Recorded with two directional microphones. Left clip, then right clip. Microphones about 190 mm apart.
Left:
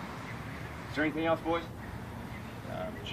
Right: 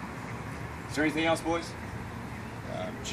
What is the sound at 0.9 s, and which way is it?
Speech, 10° right (ahead or behind).